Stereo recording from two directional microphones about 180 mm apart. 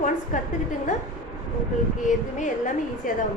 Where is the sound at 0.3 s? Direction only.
45° left (ahead or behind).